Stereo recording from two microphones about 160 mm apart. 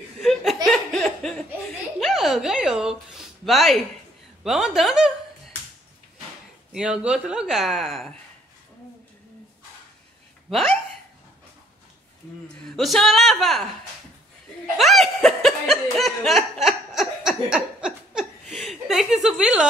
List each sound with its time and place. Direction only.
0.2 s laughter: centre (ahead or behind)
2.0 s a sound: centre (ahead or behind)
4.4 s a woman's voice: centre (ahead or behind)
6.7 s speech: 5° right (ahead or behind)
10.5 s speech: centre (ahead or behind)
12.7 s speech: centre (ahead or behind)
14.8 s chuckle: centre (ahead or behind)